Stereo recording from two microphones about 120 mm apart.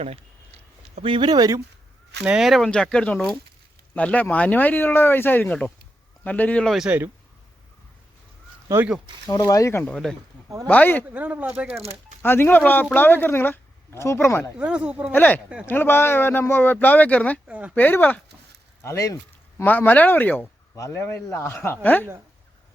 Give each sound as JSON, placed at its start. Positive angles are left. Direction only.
{"t": 0.0, "sound": "a sound", "side_deg": -60}
{"t": 2.2, "sound": "speech", "side_deg": -5}
{"t": 6.7, "sound": "speech", "side_deg": 0}
{"t": 8.7, "sound": "speech", "side_deg": -20}
{"t": 9.3, "sound": "a man's voice", "side_deg": 30}
{"t": 9.8, "sound": "speech", "side_deg": 5}
{"t": 10.7, "sound": "speech", "side_deg": 15}
{"t": 11.1, "sound": "speech", "side_deg": -15}
{"t": 11.8, "sound": "speech", "side_deg": -55}
{"t": 12.2, "sound": "speech", "side_deg": 15}
{"t": 14.6, "sound": "speech", "side_deg": -10}
{"t": 15.1, "sound": "a man's voice", "side_deg": 15}